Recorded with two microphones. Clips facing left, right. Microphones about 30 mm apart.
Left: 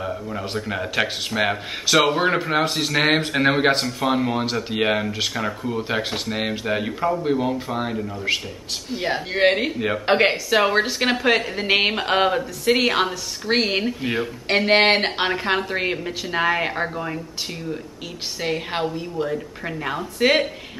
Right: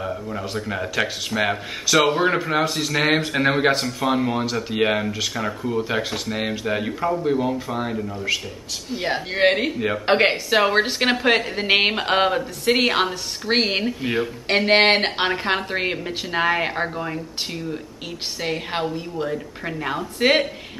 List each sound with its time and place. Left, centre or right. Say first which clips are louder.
0.0 s a woman's voice: even; centre
5.1 s speech: left 1 dB; centre
5.4 s a woman's voice: right 1 dB; centre
18.4 s a woman's voice: left 1 dB; centre